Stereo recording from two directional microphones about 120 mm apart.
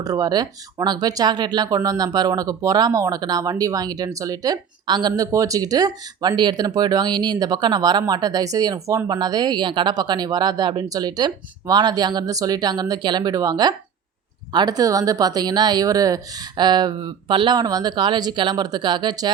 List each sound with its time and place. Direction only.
0.0 s speech: 30° right (ahead or behind)